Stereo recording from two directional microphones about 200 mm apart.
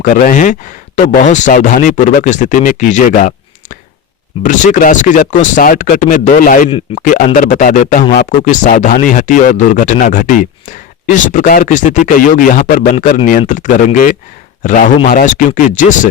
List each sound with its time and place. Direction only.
0.0 s speech: 40° left (ahead or behind)